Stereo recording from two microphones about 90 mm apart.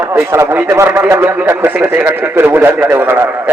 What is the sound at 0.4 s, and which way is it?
A man's voice, 20° right (ahead or behind).